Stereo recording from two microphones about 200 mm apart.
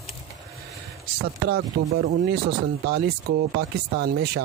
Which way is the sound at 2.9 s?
55° right (ahead or behind).